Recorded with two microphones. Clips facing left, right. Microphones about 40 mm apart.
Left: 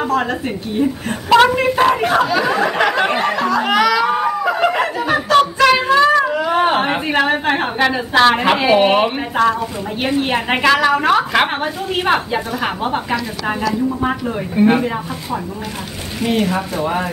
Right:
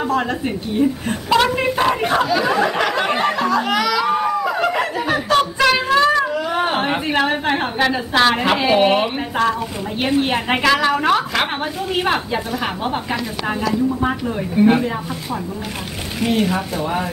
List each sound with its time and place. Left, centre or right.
0.2 s a woman's voice: centre
1.8 s a sound: centre
8.4 s a woman's voice: centre
14.0 s a woman's voice: centre
16.8 s a woman's voice: centre